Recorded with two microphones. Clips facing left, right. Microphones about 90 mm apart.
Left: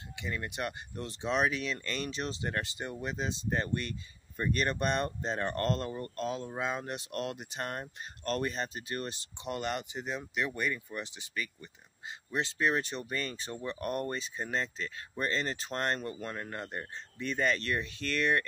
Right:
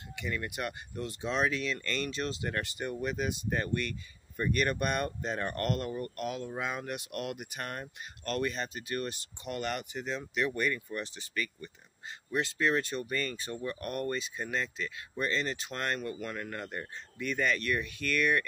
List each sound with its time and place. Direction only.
0.1 s speech: 20° left (ahead or behind)